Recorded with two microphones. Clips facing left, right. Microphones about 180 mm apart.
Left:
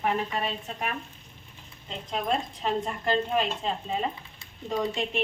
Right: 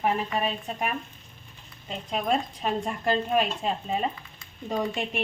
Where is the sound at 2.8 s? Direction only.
15° right (ahead or behind).